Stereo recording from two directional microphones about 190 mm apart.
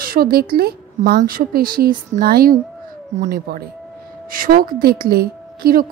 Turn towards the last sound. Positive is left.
turn(degrees=-50)  # may be behind; listen again after turning